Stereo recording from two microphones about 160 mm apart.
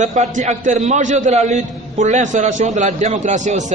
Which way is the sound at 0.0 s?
50° right (ahead or behind).